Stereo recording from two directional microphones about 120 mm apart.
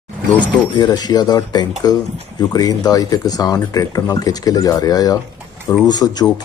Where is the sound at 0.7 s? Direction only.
35° left (ahead or behind).